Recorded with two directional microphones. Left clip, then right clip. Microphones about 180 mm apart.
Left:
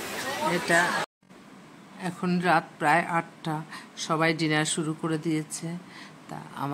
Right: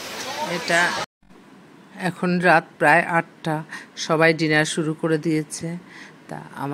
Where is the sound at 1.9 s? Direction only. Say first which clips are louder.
Right 8 dB; 35° right (ahead or behind).